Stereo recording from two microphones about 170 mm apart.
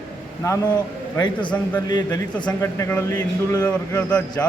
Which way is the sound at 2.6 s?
15° left (ahead or behind).